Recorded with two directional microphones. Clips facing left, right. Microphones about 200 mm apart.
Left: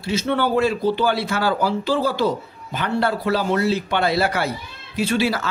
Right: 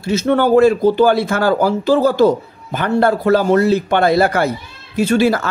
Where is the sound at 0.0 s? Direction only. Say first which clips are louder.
Right 6 dB; 45° right (ahead or behind).